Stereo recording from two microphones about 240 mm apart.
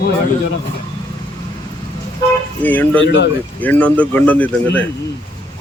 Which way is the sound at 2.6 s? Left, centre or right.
Centre.